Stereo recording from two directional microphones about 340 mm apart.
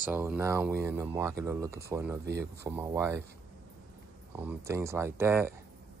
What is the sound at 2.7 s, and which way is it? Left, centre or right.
Speech, centre.